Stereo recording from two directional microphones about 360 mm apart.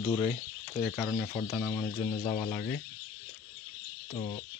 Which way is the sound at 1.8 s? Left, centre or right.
Centre.